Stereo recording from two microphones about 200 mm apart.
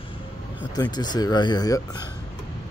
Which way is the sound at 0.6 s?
20° left (ahead or behind).